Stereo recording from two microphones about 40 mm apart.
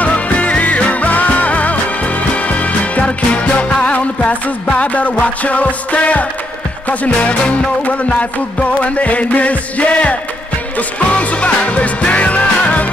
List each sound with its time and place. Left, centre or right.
0.0 s music: left